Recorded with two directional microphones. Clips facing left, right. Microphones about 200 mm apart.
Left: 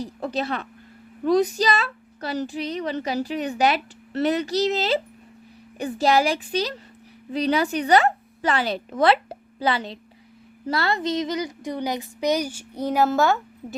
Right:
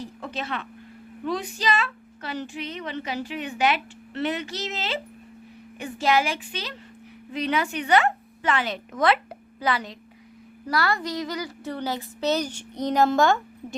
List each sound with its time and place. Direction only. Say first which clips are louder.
0.0 s a woman's voice: left 6 dB; 35° left (ahead or behind); by 13.7 s 5° left (ahead or behind)